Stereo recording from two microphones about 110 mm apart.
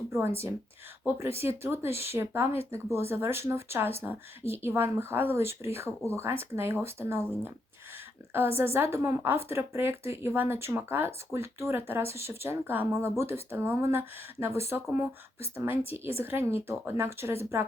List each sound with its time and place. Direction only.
0.1 s a woman's voice: 25° right (ahead or behind)